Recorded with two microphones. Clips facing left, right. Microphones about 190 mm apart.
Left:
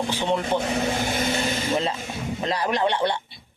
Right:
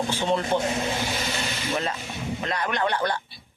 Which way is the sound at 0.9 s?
50° left (ahead or behind).